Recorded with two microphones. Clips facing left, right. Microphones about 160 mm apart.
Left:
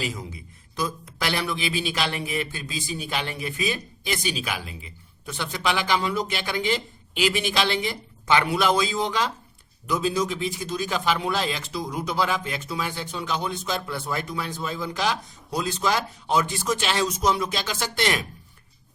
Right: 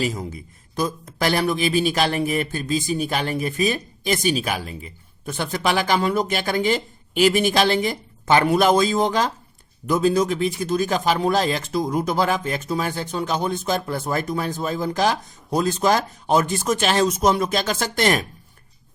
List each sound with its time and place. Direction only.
0.0 s speech: 45° right (ahead or behind)